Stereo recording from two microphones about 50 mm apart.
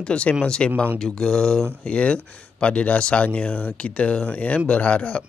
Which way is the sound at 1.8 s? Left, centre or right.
Left.